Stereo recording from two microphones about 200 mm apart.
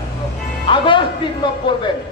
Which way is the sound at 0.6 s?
25° left (ahead or behind).